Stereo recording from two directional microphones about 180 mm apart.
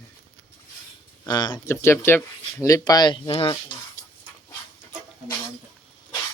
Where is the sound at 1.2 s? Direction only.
25° left (ahead or behind).